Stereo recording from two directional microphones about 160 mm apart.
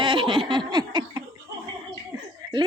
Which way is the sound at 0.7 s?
25° right (ahead or behind).